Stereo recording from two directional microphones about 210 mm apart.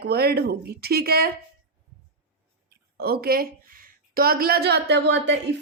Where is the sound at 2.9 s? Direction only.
50° right (ahead or behind).